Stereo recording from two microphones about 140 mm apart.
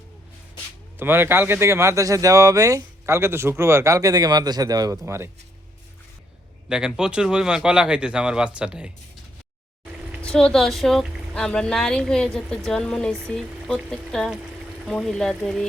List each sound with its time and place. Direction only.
0.9 s speech: 15° right (ahead or behind)
6.7 s speech: 5° right (ahead or behind)
10.2 s speech: 5° left (ahead or behind)